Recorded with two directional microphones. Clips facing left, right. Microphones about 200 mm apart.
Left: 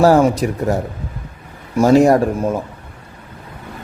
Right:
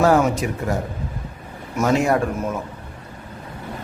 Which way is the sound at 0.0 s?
35° left (ahead or behind).